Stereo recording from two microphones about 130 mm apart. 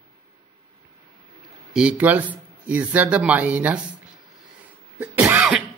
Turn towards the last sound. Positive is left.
turn(degrees=-20)  # may be behind; listen again after turning